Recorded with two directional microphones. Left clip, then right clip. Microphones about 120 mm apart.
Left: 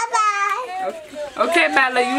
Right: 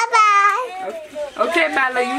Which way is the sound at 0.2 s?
75° right (ahead or behind).